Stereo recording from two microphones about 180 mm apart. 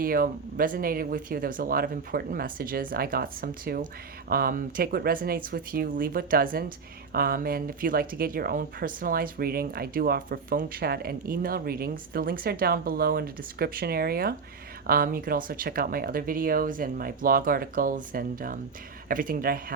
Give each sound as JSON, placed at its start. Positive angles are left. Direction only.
{"t": 0.0, "sound": "speech", "side_deg": -55}